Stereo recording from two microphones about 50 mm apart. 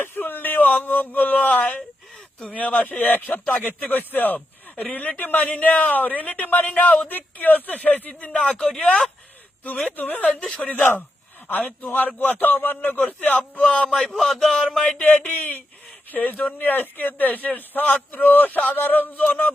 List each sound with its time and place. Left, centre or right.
0.0 s a sound: left
2.5 s speech: left
10.0 s speech: left
10.2 s speech: centre
10.6 s speech: left
11.9 s speech: left
13.9 s speech: centre
14.9 s speech: left